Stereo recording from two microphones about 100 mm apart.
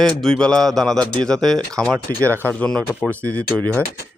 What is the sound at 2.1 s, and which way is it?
Speech, 20° left (ahead or behind).